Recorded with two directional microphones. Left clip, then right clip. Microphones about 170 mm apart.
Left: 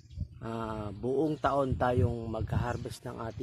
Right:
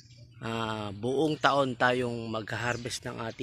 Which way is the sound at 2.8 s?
25° right (ahead or behind).